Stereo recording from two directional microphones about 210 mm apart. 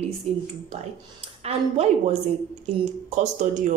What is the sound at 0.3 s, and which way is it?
Speech, 30° right (ahead or behind).